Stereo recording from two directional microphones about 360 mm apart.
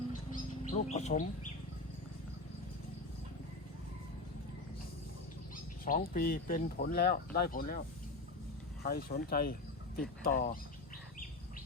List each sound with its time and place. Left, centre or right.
0.6 s speech: centre
5.8 s speech: left
8.8 s speech: left